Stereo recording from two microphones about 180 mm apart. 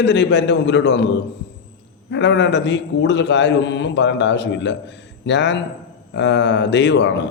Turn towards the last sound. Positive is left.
turn(degrees=75)  # may be behind; listen again after turning